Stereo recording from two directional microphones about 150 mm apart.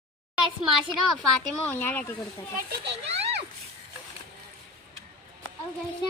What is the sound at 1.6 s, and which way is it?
Speech, 10° left (ahead or behind).